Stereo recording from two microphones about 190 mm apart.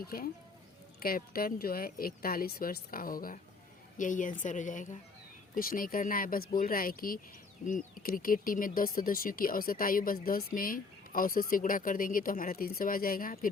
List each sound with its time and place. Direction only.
0.0 s speech: 50° left (ahead or behind)